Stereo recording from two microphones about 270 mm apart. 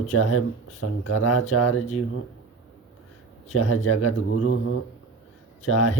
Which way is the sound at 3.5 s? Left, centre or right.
Left.